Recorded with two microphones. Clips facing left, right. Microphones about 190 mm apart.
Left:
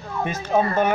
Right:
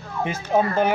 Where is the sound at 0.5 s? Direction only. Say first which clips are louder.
Even; 20° right (ahead or behind).